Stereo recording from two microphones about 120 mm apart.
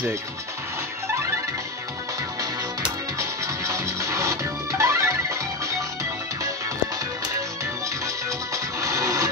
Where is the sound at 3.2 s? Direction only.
25° right (ahead or behind).